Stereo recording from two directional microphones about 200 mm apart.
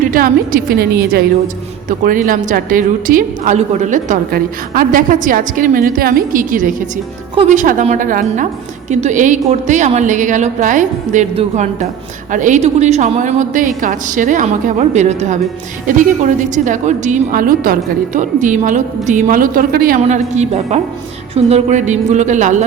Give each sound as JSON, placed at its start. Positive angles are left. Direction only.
{"t": 0.1, "sound": "a woman's voice", "side_deg": -45}